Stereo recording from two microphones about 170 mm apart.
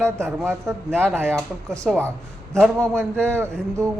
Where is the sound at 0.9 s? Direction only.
5° left (ahead or behind).